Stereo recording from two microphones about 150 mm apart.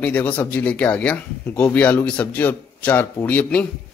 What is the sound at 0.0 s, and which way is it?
Speech, 10° left (ahead or behind).